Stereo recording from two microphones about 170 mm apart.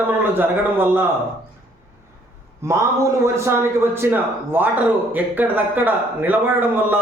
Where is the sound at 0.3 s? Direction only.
10° right (ahead or behind).